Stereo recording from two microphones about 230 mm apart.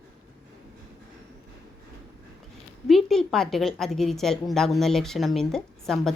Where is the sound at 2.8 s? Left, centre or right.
Centre.